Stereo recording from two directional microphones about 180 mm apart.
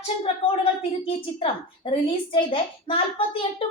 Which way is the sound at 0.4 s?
30° left (ahead or behind).